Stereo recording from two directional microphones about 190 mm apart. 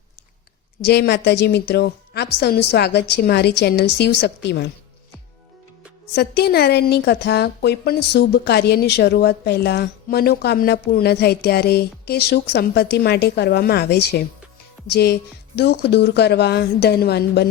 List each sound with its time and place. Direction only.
0.8 s a woman's voice: 55° left (ahead or behind)
6.1 s a woman's voice: 55° left (ahead or behind)